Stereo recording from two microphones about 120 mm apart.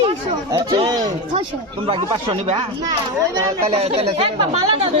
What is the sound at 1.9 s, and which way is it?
Speech, 50° right (ahead or behind).